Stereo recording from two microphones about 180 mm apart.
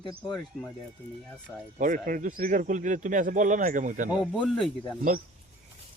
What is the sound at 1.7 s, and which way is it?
Speech, 50° right (ahead or behind).